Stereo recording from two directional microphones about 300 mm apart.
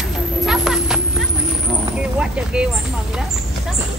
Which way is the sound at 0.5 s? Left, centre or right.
Centre.